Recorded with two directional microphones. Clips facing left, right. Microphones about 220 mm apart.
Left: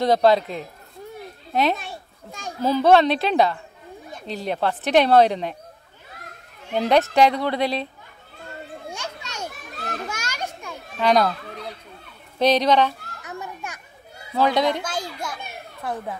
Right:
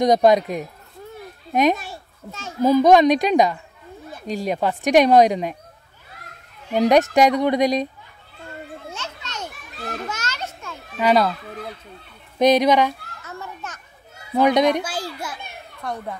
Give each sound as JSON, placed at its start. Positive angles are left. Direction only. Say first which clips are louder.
{"t": 0.0, "sound": "a child's voice", "louder": "right 2 dB", "side_deg": -15}
{"t": 6.7, "sound": "speech", "louder": "right 3 dB", "side_deg": -15}
{"t": 8.9, "sound": "children playing", "louder": "even", "side_deg": 10}
{"t": 11.0, "sound": "speech", "louder": "right 1 dB", "side_deg": -5}
{"t": 13.2, "sound": "children playing", "louder": "left 3 dB", "side_deg": 15}
{"t": 14.3, "sound": "speech", "louder": "right 4 dB", "side_deg": -20}
{"t": 14.8, "sound": "speech", "louder": "right 2 dB", "side_deg": -5}